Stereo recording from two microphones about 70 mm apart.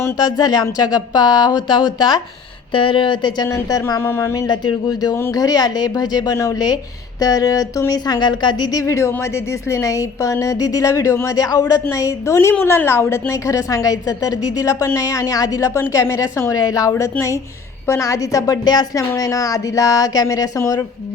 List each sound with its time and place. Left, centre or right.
0.2 s speech: left
2.0 s speech: left
3.2 s speech: left
3.5 s a woman's voice: left
4.0 s speech: left
4.4 s speech: left
5.3 s speech: left
8.8 s a woman's voice: left
11.3 s a woman's voice: left
11.9 s a woman's voice: left
17.0 s a woman's voice: left
18.9 s a woman's voice: left